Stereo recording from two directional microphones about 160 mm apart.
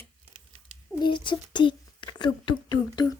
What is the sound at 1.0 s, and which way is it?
Speech, 30° left (ahead or behind).